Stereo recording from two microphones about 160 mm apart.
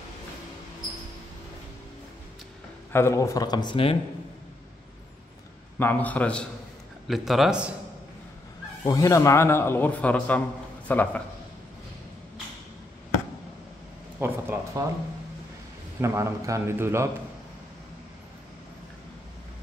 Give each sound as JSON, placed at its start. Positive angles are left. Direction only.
{"t": 2.9, "sound": "speech", "side_deg": 15}
{"t": 5.8, "sound": "speech", "side_deg": 10}
{"t": 7.1, "sound": "speech", "side_deg": 0}
{"t": 8.8, "sound": "speech", "side_deg": 20}
{"t": 14.2, "sound": "a man's voice", "side_deg": -15}
{"t": 16.0, "sound": "a man's voice", "side_deg": -15}